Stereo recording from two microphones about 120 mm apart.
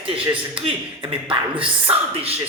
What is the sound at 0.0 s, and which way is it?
A man's voice, 50° right (ahead or behind).